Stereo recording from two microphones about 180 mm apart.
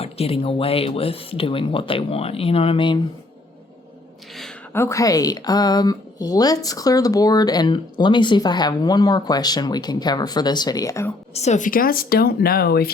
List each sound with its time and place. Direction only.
0.0 s speech: 35° left (ahead or behind)
4.7 s a woman's voice: 15° left (ahead or behind)
11.3 s speech: 40° left (ahead or behind); by 12.9 s 60° left (ahead or behind)